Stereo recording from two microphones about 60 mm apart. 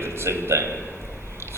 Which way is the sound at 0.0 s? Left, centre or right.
Right.